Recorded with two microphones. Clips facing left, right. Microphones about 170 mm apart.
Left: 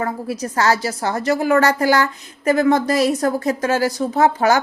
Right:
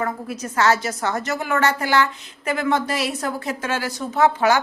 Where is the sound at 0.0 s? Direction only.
35° left (ahead or behind).